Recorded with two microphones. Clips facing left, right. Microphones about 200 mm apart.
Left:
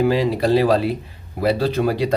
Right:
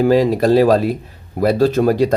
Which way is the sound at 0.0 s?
45° right (ahead or behind).